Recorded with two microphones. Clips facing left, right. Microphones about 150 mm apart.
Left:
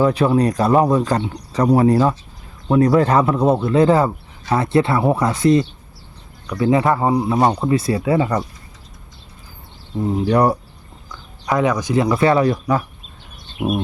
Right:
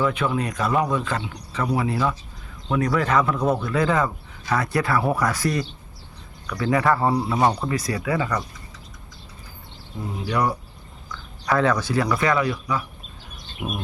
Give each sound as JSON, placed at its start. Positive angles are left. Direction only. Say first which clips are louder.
{"t": 0.0, "sound": "speech", "louder": "left 8 dB", "side_deg": 35}
{"t": 10.0, "sound": "speech", "louder": "left 8 dB", "side_deg": 35}
{"t": 11.4, "sound": "speech", "louder": "left 3 dB", "side_deg": 15}
{"t": 12.0, "sound": "speech", "louder": "left 8 dB", "side_deg": 30}